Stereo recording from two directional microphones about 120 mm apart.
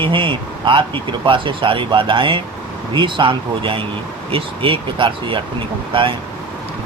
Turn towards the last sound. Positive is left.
turn(degrees=-45)  # may be behind; listen again after turning